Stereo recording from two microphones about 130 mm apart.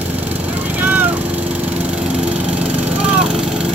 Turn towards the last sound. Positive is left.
turn(degrees=-5)  # may be behind; listen again after turning